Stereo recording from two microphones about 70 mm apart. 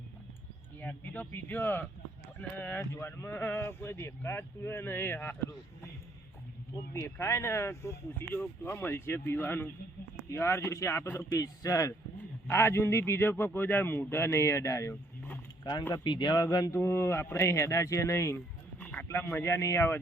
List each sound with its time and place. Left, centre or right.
0.8 s speech: left
6.9 s speech: left
11.3 s speech: left
12.5 s speech: left
15.6 s speech: left
16.0 s a man's voice: left
16.7 s speech: left
18.8 s a sound: left
19.0 s speech: left